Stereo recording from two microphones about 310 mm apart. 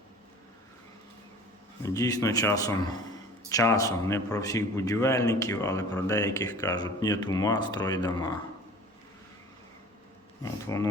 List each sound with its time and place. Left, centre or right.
1.8 s a man's voice: centre
10.4 s a man's voice: centre